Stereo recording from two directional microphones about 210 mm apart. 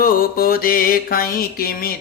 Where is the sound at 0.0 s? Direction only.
45° left (ahead or behind).